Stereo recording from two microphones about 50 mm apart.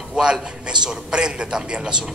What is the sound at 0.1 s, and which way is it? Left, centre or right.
A man's voice, centre.